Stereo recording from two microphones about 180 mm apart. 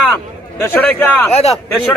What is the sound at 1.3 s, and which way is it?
Speech, 35° left (ahead or behind).